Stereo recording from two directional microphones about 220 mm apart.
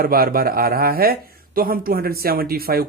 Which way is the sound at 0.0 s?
40° right (ahead or behind).